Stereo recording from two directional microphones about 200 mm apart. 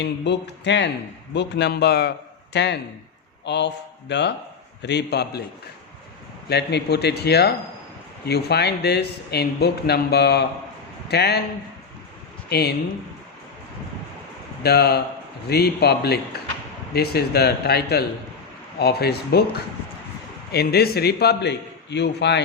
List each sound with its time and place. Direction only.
0.0 s a man's voice: 60° left (ahead or behind)
6.5 s a man's voice: 55° left (ahead or behind)
12.5 s speech: 55° left (ahead or behind)
14.6 s a man's voice: 55° left (ahead or behind)
20.5 s a man's voice: 55° left (ahead or behind)